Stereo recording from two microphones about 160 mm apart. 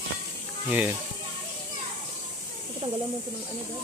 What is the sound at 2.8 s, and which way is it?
Speech, 40° right (ahead or behind).